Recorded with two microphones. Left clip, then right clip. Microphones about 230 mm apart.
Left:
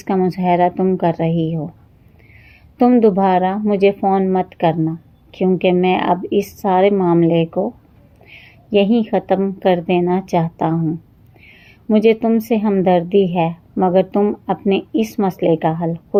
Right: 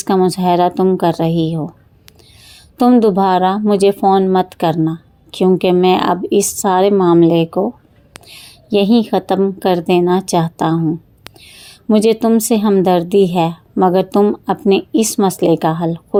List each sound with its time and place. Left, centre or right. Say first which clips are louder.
0.0 s a woman's voice: right 4 dB; right